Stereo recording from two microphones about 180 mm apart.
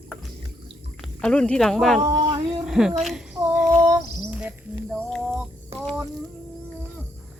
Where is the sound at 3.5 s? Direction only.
Centre (ahead or behind).